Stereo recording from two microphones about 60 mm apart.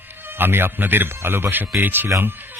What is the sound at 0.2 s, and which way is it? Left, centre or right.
Speech, right.